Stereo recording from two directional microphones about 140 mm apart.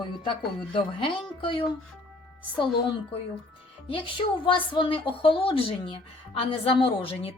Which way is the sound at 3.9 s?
35° left (ahead or behind).